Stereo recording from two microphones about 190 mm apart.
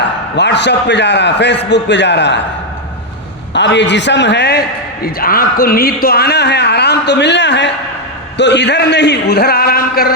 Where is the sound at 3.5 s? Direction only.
65° left (ahead or behind).